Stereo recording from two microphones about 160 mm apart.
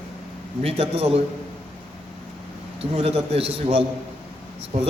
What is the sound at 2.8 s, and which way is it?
A man's voice, 40° right (ahead or behind).